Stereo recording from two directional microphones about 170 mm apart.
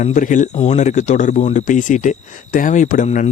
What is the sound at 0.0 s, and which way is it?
Speech, 50° left (ahead or behind).